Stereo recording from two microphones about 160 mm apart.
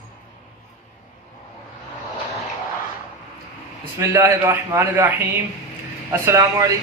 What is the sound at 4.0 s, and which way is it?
A man's voice, 15° right (ahead or behind).